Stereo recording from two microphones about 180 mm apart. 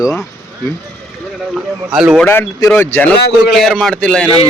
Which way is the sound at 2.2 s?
10° left (ahead or behind).